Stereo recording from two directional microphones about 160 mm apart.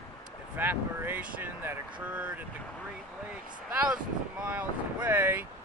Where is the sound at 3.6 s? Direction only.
10° right (ahead or behind).